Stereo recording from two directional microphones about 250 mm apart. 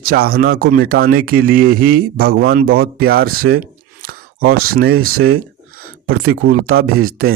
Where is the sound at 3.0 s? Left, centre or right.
Right.